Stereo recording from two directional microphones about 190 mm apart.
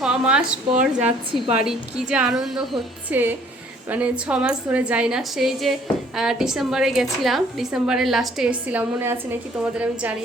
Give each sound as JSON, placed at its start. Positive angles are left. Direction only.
{"t": 0.0, "sound": "speech", "side_deg": -5}
{"t": 1.0, "sound": "a woman's voice", "side_deg": -30}
{"t": 1.6, "sound": "a woman's voice", "side_deg": -5}